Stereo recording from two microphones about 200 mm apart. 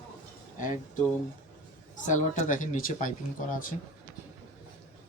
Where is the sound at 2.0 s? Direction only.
40° left (ahead or behind).